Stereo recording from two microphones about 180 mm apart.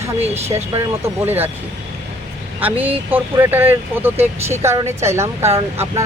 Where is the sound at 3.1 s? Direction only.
10° right (ahead or behind).